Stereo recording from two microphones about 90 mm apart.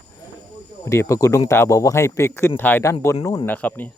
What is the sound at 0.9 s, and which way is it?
Speech, 35° left (ahead or behind).